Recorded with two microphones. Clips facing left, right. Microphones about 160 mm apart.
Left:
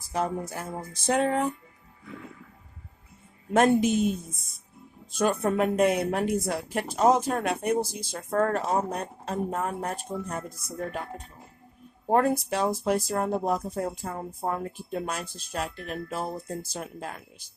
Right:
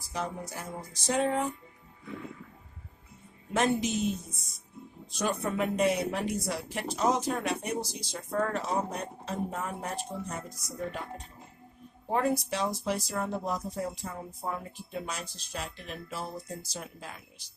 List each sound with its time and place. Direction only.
0.1 s music: 50° left (ahead or behind)
3.5 s a woman's voice: 55° left (ahead or behind)
12.1 s a woman's voice: 50° left (ahead or behind)